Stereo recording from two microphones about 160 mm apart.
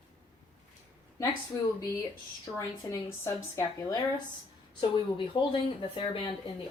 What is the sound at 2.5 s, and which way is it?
Speech, 20° left (ahead or behind).